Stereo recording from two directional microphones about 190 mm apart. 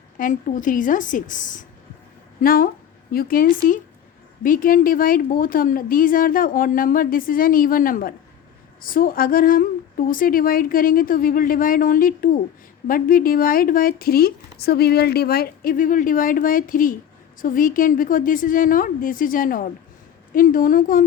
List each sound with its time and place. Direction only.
0.2 s speech: 45° left (ahead or behind)